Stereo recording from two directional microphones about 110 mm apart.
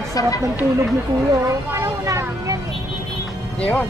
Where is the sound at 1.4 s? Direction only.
25° right (ahead or behind).